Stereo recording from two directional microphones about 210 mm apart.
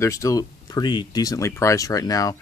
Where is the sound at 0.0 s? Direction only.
15° left (ahead or behind).